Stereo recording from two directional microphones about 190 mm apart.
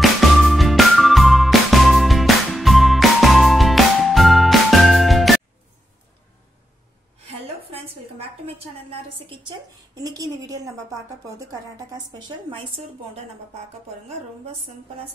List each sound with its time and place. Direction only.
0.0 s music: centre (ahead or behind)
10.0 s a woman's voice: 20° right (ahead or behind)